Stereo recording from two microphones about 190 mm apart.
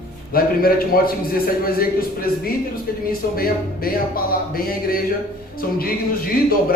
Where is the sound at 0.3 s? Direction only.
50° left (ahead or behind).